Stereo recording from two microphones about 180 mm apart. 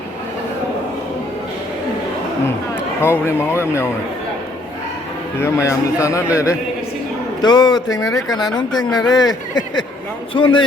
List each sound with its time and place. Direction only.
3.0 s a man's voice: 15° left (ahead or behind)
5.4 s a man's voice: 15° left (ahead or behind)